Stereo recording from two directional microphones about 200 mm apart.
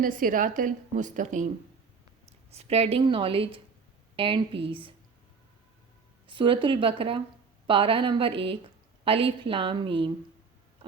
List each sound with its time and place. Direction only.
0.0 s a woman's voice: 45° right (ahead or behind)
2.5 s a woman's voice: 30° right (ahead or behind)
6.2 s a woman's voice: 25° right (ahead or behind)